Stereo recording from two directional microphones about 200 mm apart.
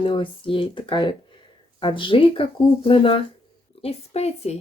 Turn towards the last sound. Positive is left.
turn(degrees=30)  # may be behind; listen again after turning